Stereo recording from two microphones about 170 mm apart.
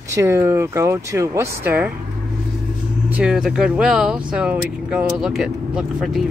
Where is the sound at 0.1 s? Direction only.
15° right (ahead or behind).